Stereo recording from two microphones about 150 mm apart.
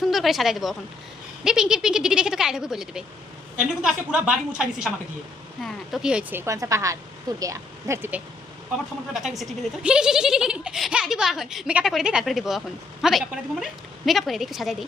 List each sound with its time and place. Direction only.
0.0 s a child's voice: centre (ahead or behind)
6.4 s a woman's voice: 20° right (ahead or behind)
9.1 s a child's voice: centre (ahead or behind)